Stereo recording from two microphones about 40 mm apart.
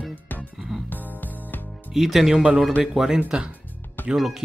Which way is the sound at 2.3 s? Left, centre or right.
Right.